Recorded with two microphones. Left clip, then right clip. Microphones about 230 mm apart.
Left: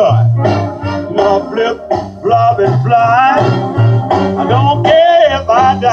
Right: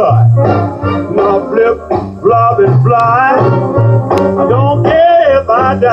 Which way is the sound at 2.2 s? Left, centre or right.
Left.